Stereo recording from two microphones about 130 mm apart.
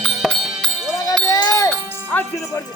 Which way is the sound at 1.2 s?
25° left (ahead or behind).